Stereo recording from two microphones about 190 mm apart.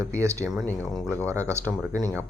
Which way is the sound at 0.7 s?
10° left (ahead or behind).